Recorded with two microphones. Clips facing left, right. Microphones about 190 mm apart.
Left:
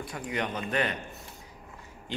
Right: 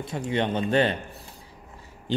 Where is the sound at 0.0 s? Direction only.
25° right (ahead or behind).